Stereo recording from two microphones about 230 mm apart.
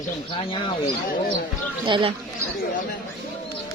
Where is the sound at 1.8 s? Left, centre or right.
Right.